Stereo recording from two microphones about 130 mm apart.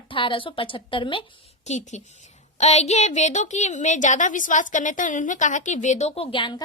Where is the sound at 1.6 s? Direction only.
65° left (ahead or behind).